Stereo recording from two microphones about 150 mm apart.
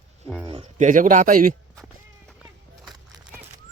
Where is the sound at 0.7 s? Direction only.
60° right (ahead or behind).